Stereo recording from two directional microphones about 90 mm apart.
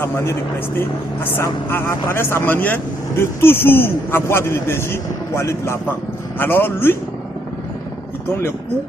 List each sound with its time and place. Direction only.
0.0 s a man's voice: 25° left (ahead or behind)